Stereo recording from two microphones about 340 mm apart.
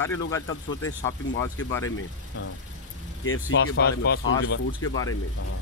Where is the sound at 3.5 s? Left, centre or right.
Left.